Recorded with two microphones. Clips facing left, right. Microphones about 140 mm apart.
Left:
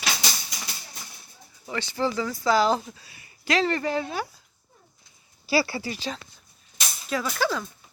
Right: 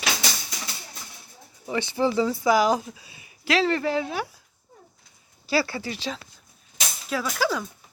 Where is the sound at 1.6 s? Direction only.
20° right (ahead or behind).